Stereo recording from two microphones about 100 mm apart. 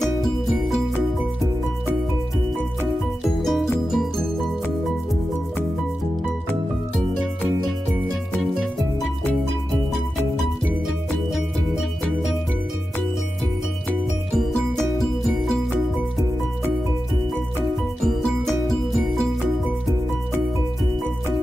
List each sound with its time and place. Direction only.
3.4 s music: centre (ahead or behind)
18.0 s music: centre (ahead or behind)